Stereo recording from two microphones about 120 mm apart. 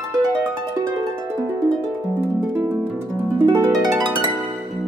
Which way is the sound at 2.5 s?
15° right (ahead or behind).